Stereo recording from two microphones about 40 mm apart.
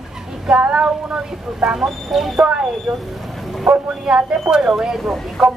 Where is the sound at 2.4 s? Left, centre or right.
Right.